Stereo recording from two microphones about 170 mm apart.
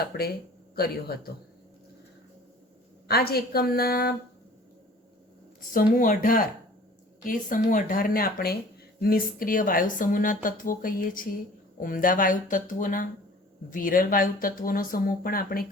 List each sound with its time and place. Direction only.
0.0 s speech: 65° left (ahead or behind)
3.1 s speech: 65° left (ahead or behind)
5.5 s speech: 55° left (ahead or behind)